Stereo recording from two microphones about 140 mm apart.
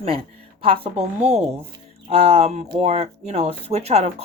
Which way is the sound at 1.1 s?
55° right (ahead or behind).